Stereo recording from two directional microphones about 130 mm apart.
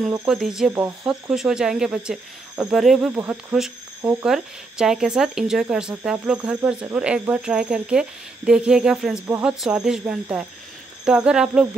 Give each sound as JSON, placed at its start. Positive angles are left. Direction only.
{"t": 0.3, "sound": "speech", "side_deg": -5}
{"t": 1.3, "sound": "speech", "side_deg": -5}
{"t": 3.2, "sound": "speech", "side_deg": -15}
{"t": 4.2, "sound": "speech", "side_deg": -5}